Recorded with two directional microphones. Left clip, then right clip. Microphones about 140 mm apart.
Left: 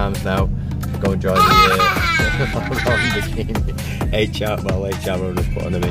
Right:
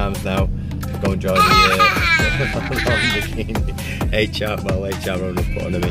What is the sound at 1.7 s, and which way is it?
Music, 10° left (ahead or behind).